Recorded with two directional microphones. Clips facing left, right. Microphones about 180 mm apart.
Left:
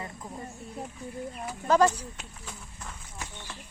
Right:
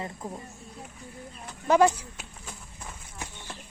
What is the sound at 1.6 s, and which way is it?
Speech, 10° right (ahead or behind).